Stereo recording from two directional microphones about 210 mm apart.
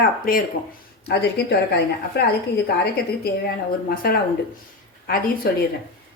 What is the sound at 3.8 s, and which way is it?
A woman's voice, 45° left (ahead or behind).